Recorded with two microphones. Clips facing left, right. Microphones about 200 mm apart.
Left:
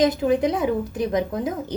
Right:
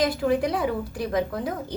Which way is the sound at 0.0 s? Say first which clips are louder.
Left 4 dB; 20° left (ahead or behind).